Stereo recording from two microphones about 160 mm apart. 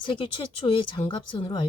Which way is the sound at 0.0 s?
30° left (ahead or behind).